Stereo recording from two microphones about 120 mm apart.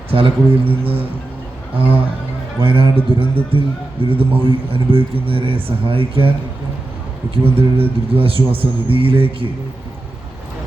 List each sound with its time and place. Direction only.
0.1 s speech: 50° right (ahead or behind)
7.4 s speech: 50° right (ahead or behind)